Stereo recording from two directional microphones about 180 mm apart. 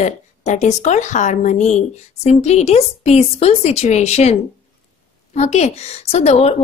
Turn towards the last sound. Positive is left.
turn(degrees=35)  # may be behind; listen again after turning